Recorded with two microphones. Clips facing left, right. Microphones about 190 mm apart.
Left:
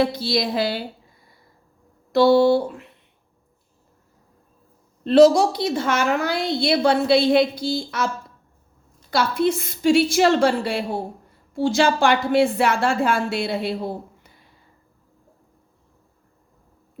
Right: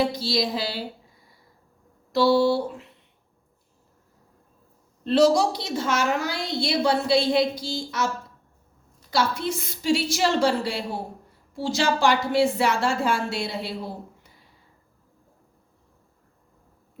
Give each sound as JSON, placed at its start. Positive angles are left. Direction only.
{"t": 0.0, "sound": "a woman's voice", "side_deg": 55}
{"t": 2.1, "sound": "a woman's voice", "side_deg": 55}
{"t": 5.0, "sound": "a woman's voice", "side_deg": 55}